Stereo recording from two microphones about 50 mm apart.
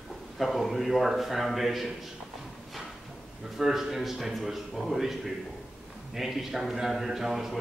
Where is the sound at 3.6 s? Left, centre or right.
Centre.